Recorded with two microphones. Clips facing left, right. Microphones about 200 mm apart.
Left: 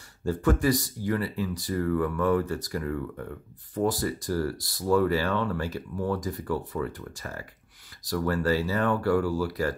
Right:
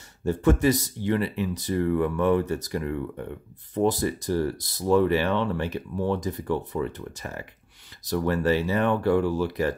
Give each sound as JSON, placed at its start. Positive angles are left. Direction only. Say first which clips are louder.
{"t": 0.2, "sound": "speech", "louder": "right 3 dB", "side_deg": -25}